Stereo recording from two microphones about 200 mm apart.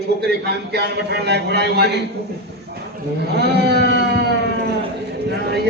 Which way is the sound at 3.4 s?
55° right (ahead or behind).